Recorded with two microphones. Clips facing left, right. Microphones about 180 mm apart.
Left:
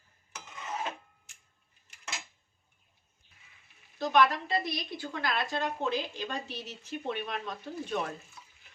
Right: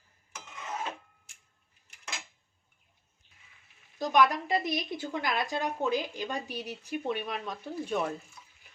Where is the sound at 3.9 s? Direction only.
15° right (ahead or behind).